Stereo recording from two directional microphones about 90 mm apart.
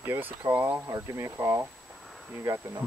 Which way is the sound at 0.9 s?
35° right (ahead or behind).